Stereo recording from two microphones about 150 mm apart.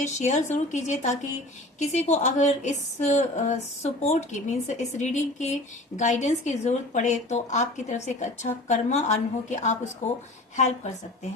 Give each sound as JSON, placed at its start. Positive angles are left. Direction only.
{"t": 0.0, "sound": "a woman's voice", "side_deg": 50}